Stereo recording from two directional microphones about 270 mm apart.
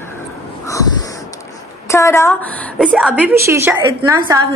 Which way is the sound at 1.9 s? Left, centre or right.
Centre.